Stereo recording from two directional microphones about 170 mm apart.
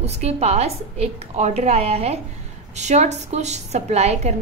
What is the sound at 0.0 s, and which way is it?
A woman's voice, 40° right (ahead or behind).